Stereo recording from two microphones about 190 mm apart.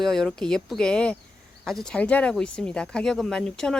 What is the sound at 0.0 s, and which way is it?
Speech, centre (ahead or behind).